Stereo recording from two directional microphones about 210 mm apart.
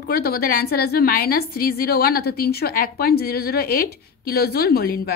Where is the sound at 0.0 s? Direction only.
45° left (ahead or behind).